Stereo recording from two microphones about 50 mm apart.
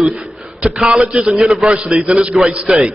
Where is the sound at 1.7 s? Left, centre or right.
Centre.